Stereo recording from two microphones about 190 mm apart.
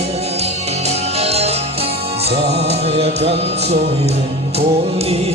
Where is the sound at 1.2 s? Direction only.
35° right (ahead or behind).